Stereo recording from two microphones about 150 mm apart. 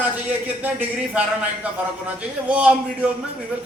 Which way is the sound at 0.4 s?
10° right (ahead or behind).